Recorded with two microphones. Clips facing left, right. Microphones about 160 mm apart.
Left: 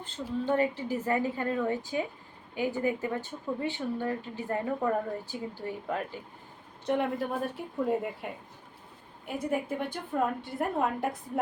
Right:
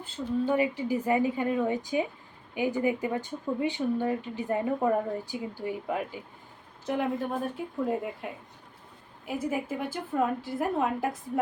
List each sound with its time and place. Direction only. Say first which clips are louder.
0.0 s speech: right 4 dB; 10° right (ahead or behind)
6.8 s a woman's voice: even; centre (ahead or behind)